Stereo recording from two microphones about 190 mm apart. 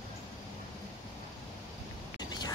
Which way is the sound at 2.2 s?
20° left (ahead or behind).